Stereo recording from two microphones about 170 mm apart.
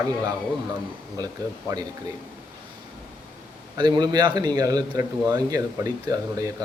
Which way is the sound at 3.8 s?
25° right (ahead or behind).